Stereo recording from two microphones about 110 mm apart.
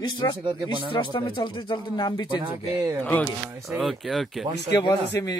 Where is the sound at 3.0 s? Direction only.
15° left (ahead or behind).